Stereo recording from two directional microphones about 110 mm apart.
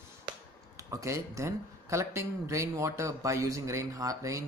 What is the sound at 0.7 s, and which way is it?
A man's voice, 25° right (ahead or behind).